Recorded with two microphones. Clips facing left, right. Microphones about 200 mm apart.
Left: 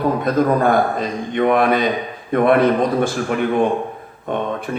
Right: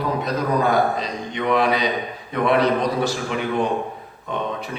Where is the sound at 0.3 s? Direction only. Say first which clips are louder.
Left 5 dB; 50° left (ahead or behind).